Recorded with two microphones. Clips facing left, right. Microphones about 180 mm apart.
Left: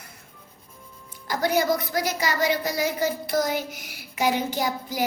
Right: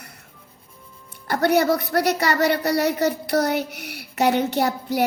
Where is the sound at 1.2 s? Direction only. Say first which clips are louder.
Right 4 dB; 65° right (ahead or behind).